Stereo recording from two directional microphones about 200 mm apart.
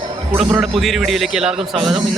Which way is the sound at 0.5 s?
Centre (ahead or behind).